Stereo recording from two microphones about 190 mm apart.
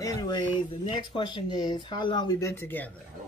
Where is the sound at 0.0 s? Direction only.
20° left (ahead or behind).